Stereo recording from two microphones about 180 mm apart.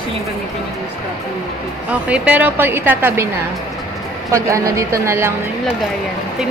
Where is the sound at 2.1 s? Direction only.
10° right (ahead or behind).